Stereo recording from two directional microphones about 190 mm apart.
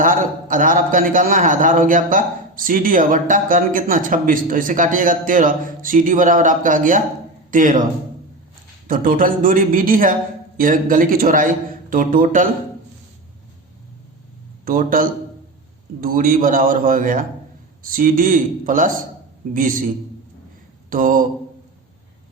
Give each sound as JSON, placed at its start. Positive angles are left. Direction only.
{"t": 0.0, "sound": "a man's voice", "side_deg": -45}
{"t": 8.9, "sound": "a man's voice", "side_deg": -45}
{"t": 14.6, "sound": "a man's voice", "side_deg": -45}
{"t": 20.9, "sound": "a man's voice", "side_deg": -45}